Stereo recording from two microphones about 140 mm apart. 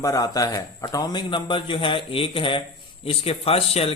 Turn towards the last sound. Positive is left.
turn(degrees=45)  # may be behind; listen again after turning